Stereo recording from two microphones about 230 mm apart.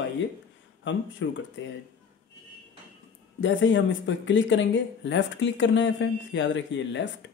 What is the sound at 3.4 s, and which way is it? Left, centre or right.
Speech, left.